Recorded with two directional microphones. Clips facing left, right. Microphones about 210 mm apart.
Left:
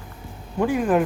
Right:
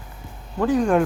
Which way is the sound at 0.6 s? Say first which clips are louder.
Right 1 dB; 10° left (ahead or behind).